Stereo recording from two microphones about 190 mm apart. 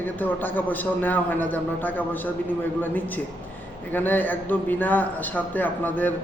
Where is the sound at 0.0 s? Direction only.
10° left (ahead or behind).